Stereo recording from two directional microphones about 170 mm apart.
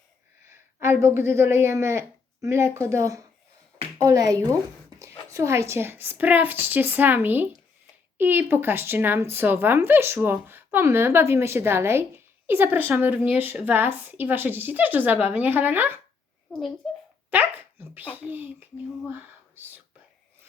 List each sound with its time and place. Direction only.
0.4 s speech: 15° right (ahead or behind)
16.8 s a sound: centre (ahead or behind)
17.3 s speech: 10° right (ahead or behind)